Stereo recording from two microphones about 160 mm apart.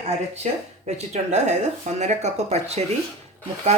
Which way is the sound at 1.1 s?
45° right (ahead or behind).